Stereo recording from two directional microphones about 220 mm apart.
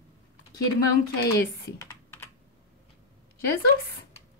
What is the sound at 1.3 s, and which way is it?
Computer keyboard, 10° left (ahead or behind).